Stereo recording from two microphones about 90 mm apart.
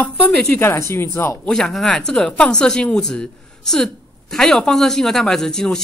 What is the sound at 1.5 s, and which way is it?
Speech, 5° left (ahead or behind).